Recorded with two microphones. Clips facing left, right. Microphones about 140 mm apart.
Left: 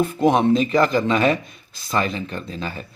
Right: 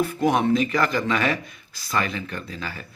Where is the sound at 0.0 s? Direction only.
25° left (ahead or behind).